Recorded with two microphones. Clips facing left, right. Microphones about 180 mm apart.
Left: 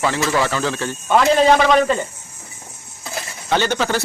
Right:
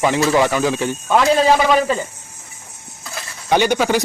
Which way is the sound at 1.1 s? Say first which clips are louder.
Left 1 dB; centre (ahead or behind).